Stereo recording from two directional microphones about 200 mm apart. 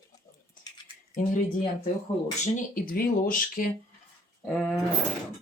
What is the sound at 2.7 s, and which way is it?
Speech, 45° left (ahead or behind).